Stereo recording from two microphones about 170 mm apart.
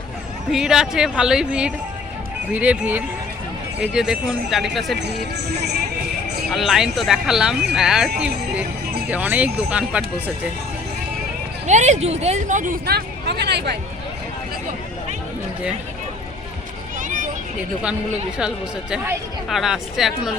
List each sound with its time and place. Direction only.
0.5 s speech: 5° right (ahead or behind)
6.5 s speech: centre (ahead or behind)
11.6 s speech: 45° right (ahead or behind); by 13.7 s 80° right
17.0 s a sound: 50° right (ahead or behind)
18.3 s speech: 5° right (ahead or behind)